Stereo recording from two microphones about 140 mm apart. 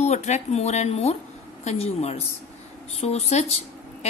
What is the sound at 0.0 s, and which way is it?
Speech, 55° left (ahead or behind).